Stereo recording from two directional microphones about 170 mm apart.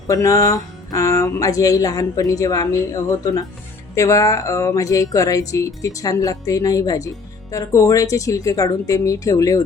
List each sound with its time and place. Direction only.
0.1 s speech: 20° left (ahead or behind)